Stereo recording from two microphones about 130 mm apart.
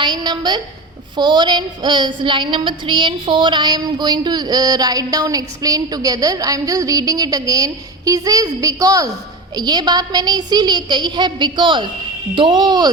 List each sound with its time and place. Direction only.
0.0 s a woman's voice: 35° right (ahead or behind)
1.1 s a sound: 35° right (ahead or behind)
9.6 s a woman's voice: 35° right (ahead or behind)